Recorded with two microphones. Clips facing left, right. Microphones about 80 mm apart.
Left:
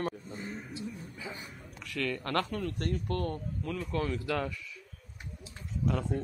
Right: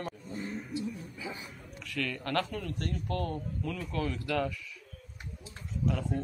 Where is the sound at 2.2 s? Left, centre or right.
Left.